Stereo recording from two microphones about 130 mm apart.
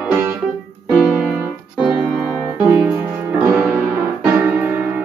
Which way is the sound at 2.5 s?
15° right (ahead or behind).